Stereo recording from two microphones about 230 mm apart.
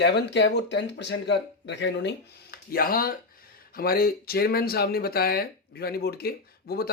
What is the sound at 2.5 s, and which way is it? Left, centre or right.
Speech, left.